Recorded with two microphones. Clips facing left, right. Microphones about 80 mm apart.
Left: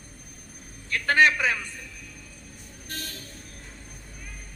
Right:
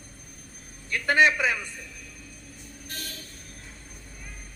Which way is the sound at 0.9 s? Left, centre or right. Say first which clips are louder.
Left 1 dB; centre.